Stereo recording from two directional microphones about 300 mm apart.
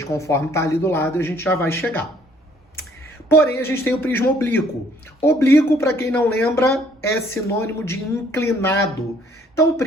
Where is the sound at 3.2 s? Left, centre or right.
Centre.